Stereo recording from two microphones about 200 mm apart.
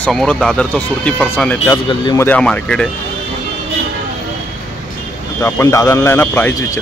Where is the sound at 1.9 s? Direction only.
20° left (ahead or behind).